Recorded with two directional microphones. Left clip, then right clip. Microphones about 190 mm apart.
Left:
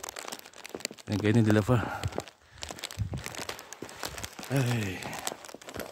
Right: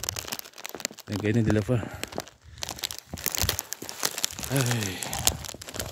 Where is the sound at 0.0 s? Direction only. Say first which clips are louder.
Right 5 dB; 50° right (ahead or behind).